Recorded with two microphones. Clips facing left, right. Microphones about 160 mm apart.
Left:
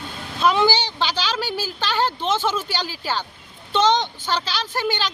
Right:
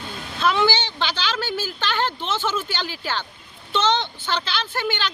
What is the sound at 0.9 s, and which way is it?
Speech, 10° left (ahead or behind).